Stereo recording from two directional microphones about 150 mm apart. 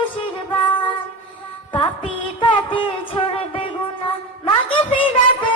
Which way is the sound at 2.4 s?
35° left (ahead or behind).